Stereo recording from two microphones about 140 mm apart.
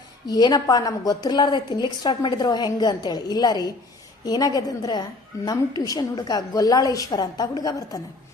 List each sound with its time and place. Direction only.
0.3 s a woman's voice: 30° left (ahead or behind)